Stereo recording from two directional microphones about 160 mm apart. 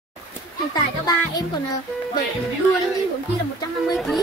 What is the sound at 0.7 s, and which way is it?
Speech, 25° left (ahead or behind).